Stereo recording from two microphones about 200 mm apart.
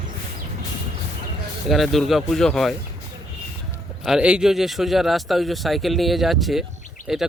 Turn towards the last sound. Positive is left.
turn(degrees=0)  # may be behind; listen again after turning